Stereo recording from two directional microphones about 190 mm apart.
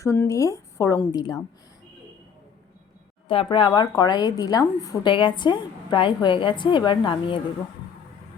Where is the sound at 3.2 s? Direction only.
25° left (ahead or behind).